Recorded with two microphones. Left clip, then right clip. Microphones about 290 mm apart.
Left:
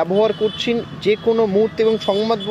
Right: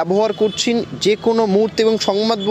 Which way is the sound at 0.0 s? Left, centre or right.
Right.